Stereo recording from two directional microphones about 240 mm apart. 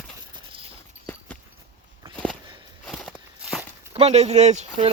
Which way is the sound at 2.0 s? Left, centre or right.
Right.